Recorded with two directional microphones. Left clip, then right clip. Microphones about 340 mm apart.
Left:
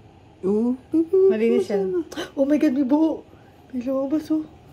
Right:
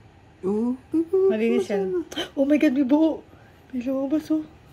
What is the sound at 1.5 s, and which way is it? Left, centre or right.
Speech, centre.